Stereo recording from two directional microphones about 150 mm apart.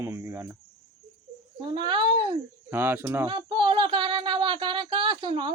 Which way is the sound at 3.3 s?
35° right (ahead or behind).